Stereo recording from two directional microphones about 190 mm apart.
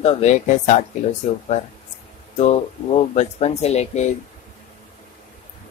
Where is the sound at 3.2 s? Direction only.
35° left (ahead or behind).